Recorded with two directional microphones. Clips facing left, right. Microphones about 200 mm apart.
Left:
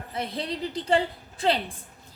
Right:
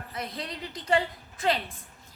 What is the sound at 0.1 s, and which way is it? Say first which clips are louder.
A woman's voice: left 6 dB; 30° left (ahead or behind).